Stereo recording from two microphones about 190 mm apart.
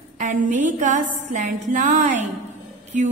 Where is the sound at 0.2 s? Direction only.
40° right (ahead or behind).